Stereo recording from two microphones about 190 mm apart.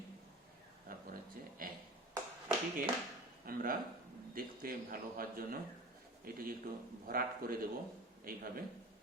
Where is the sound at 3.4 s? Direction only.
50° right (ahead or behind).